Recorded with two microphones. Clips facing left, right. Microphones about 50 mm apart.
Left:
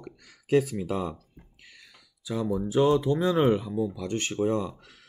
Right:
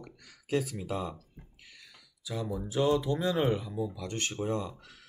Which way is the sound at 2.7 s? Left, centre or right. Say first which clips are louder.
Left 5 dB; left.